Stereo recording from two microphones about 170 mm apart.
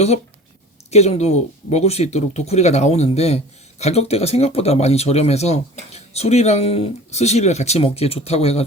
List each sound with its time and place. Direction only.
0.9 s speech: 40° left (ahead or behind)